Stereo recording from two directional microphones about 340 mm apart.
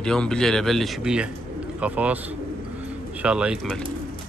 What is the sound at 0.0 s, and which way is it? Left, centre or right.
Speech, centre.